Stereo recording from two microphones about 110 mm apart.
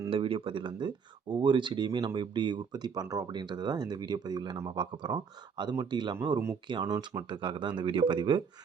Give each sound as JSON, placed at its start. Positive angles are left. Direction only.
{"t": 0.1, "sound": "speech", "side_deg": -55}
{"t": 7.0, "sound": "speech", "side_deg": -35}
{"t": 7.3, "sound": "speech", "side_deg": -45}